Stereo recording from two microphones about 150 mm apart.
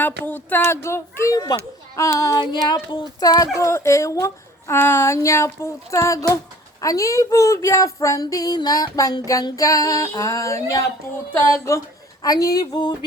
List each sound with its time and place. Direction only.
0.0 s a sound: 10° left (ahead or behind)
0.7 s speech: 15° left (ahead or behind)
12.2 s speech: 25° left (ahead or behind)